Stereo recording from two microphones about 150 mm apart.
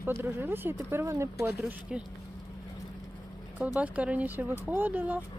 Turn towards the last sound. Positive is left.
turn(degrees=-10)  # may be behind; listen again after turning